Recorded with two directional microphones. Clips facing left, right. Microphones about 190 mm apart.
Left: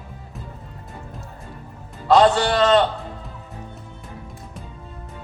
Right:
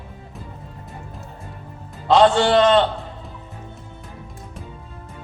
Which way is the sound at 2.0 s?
25° right (ahead or behind).